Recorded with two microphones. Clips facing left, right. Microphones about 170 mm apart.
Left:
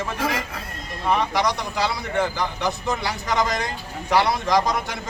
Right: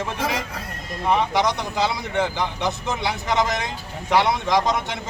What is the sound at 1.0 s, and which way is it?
Speech, 20° right (ahead or behind).